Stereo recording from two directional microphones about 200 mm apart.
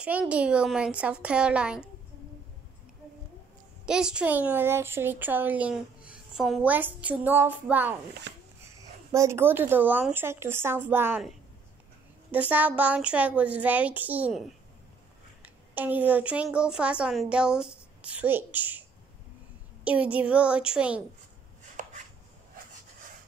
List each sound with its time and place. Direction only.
0.0 s a woman's voice: 5° right (ahead or behind)
3.8 s speech: 5° right (ahead or behind)
9.1 s speech: 15° right (ahead or behind)
12.3 s a woman's voice: 10° right (ahead or behind)
21.8 s chopping: 40° right (ahead or behind)